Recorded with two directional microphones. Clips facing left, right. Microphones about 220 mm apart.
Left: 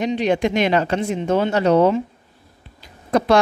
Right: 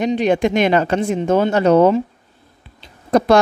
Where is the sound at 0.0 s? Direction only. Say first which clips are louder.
Right 3 dB; 50° right (ahead or behind).